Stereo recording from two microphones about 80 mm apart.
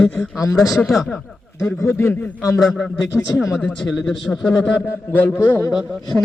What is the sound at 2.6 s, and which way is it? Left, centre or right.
Speech, centre.